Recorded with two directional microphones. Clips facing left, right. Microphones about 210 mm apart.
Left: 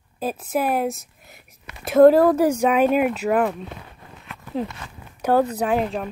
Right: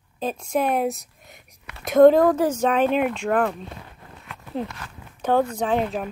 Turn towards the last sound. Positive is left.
turn(degrees=0)  # may be behind; listen again after turning